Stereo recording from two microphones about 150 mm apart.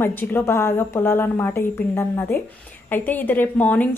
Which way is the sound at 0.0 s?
15° left (ahead or behind).